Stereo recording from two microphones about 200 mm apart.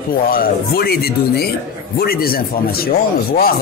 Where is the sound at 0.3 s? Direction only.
50° left (ahead or behind).